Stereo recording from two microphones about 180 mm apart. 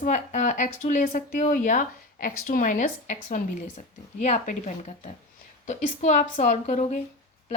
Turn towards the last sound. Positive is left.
turn(degrees=40)  # may be behind; listen again after turning